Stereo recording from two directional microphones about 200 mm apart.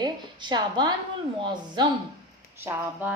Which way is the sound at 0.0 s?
20° right (ahead or behind).